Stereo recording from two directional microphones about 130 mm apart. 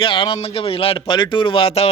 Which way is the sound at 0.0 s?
40° left (ahead or behind).